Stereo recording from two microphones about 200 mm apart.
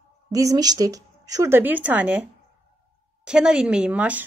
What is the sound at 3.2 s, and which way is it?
Speech, 5° right (ahead or behind).